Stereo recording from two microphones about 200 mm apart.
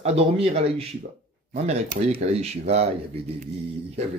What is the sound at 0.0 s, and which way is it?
A man's voice, 30° right (ahead or behind).